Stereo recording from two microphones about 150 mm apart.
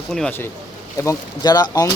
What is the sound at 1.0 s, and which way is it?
Speech, 20° left (ahead or behind).